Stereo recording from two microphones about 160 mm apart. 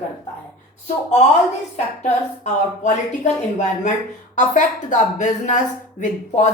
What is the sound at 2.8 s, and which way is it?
A woman's voice, 50° left (ahead or behind).